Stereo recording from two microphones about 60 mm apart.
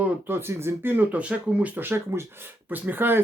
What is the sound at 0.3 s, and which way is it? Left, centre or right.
Speech, right.